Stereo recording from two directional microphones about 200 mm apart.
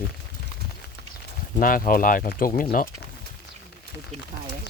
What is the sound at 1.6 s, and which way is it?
Speech, 45° left (ahead or behind).